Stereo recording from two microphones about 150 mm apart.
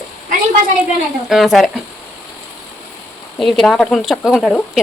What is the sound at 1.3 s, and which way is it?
Speech, centre (ahead or behind).